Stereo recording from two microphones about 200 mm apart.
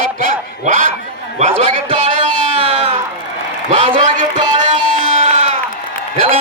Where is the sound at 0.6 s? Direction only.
40° right (ahead or behind).